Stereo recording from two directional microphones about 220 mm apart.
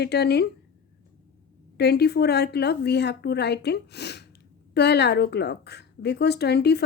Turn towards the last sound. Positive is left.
turn(degrees=50)  # may be behind; listen again after turning